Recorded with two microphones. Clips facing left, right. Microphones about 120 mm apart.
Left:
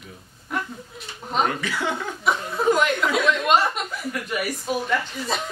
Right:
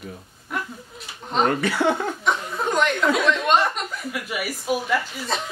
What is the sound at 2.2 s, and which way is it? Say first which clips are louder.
Speech: left 8 dB; 5° left (ahead or behind).